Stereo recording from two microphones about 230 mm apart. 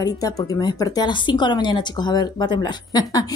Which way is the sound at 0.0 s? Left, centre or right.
Centre.